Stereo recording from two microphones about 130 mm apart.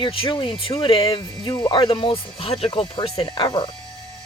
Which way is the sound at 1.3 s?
30° left (ahead or behind).